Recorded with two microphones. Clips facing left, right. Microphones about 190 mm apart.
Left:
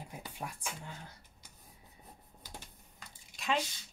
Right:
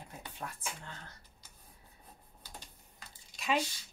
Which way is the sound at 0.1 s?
10° left (ahead or behind).